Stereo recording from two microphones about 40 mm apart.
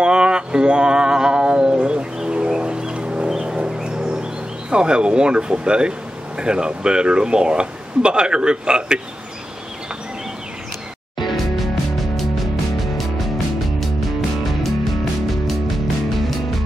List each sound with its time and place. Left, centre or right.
0.0 s music: right
2.3 s a sound: right
3.4 s speech: right
11.2 s music: centre